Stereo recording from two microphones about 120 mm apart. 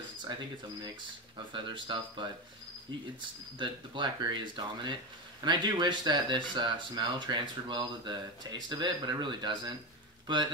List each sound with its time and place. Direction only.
1.5 s speech: 40° right (ahead or behind)